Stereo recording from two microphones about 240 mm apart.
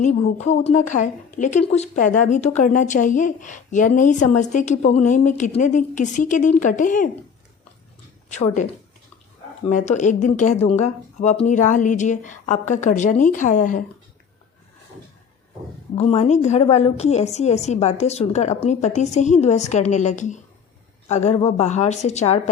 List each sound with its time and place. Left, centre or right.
0.0 s a woman's voice: left
8.3 s a woman's voice: left
9.7 s a woman's voice: left
16.0 s a woman's voice: left